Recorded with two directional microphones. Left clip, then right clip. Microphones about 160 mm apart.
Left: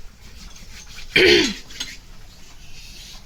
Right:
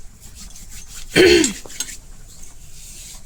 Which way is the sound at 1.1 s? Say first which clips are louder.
Right 2 dB; 15° right (ahead or behind).